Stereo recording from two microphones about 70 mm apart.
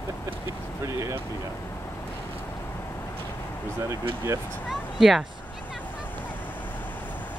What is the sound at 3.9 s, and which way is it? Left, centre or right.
Speech, right.